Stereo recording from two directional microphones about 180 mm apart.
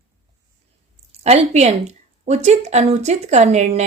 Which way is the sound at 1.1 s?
35° right (ahead or behind).